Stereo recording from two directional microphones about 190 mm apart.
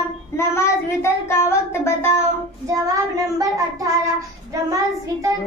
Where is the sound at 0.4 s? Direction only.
15° left (ahead or behind).